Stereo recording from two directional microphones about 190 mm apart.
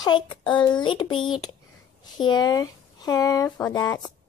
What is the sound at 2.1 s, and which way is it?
Speech, 25° left (ahead or behind).